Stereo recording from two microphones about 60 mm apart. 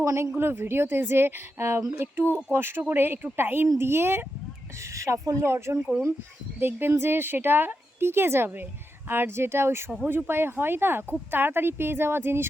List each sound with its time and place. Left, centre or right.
0.0 s a woman's voice: right
0.3 s a woman's voice: right
4.9 s speech: right
5.5 s speech: right
6.6 s a woman's voice: right